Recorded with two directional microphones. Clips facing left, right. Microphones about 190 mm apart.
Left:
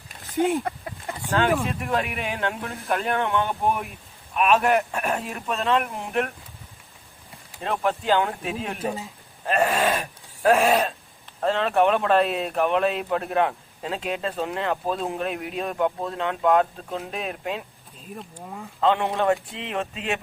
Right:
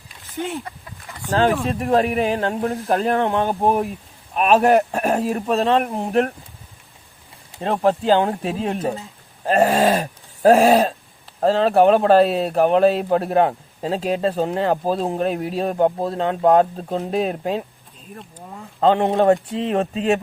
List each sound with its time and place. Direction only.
1.3 s speech: 35° right (ahead or behind)
7.5 s speech: 35° right (ahead or behind)
18.1 s speech: centre (ahead or behind)
18.8 s speech: 35° right (ahead or behind)